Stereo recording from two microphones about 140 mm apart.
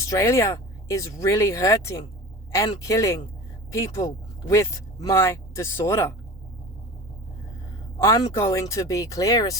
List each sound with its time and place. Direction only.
0.1 s speech: 20° left (ahead or behind)
7.9 s speech: 25° left (ahead or behind)